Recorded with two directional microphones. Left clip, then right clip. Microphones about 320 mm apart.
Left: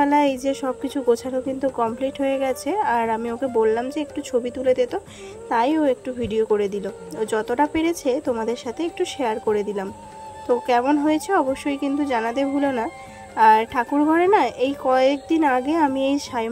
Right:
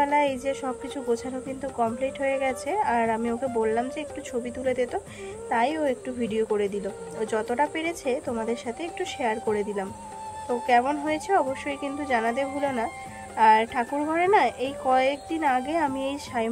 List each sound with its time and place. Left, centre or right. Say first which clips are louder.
0.0 s a woman's voice: left 4 dB; centre